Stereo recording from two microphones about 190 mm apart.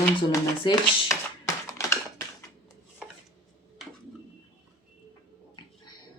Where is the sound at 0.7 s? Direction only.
25° left (ahead or behind).